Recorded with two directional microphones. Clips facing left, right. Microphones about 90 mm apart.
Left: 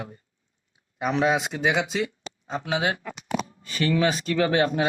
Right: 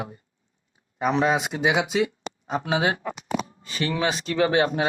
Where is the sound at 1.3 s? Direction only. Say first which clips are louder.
Right 1 dB; 5° right (ahead or behind).